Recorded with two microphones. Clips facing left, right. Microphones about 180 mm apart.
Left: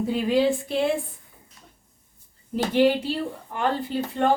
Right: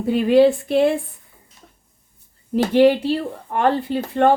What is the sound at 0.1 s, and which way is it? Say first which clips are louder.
Speech: right 9 dB; 60° right (ahead or behind).